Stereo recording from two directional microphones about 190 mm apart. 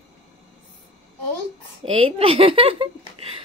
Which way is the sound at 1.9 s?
30° right (ahead or behind).